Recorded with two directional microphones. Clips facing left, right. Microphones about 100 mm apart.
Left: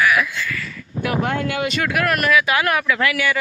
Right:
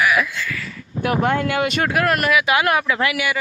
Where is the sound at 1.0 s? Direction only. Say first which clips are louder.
Right 2 dB; 40° right (ahead or behind).